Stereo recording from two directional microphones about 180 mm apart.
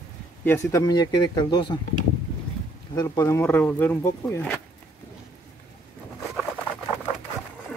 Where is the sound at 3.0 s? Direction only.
15° left (ahead or behind).